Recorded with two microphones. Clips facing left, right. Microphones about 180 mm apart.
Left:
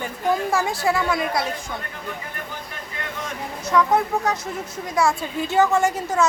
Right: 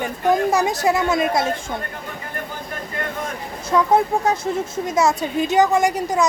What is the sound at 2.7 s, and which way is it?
Vehicle, 50° right (ahead or behind).